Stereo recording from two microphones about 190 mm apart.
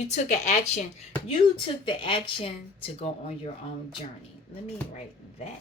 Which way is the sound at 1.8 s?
25° left (ahead or behind).